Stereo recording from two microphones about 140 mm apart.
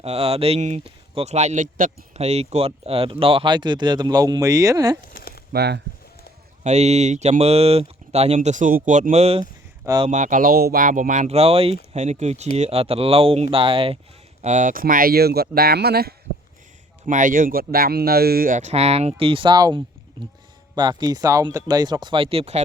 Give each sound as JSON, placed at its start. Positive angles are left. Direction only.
{"t": 0.0, "sound": "speech", "side_deg": -45}
{"t": 2.1, "sound": "speech", "side_deg": -50}
{"t": 5.1, "sound": "a sound", "side_deg": 90}
{"t": 6.7, "sound": "speech", "side_deg": -55}
{"t": 8.4, "sound": "speech", "side_deg": -65}
{"t": 9.4, "sound": "a sound", "side_deg": -25}
{"t": 10.1, "sound": "speech", "side_deg": -65}
{"t": 11.3, "sound": "speech", "side_deg": -45}
{"t": 14.4, "sound": "speech", "side_deg": -65}
{"t": 17.1, "sound": "speech", "side_deg": -65}